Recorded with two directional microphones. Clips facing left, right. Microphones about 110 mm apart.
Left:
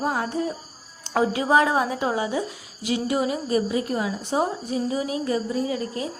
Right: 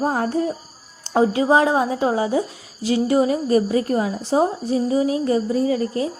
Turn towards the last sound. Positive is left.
turn(degrees=-35)  # may be behind; listen again after turning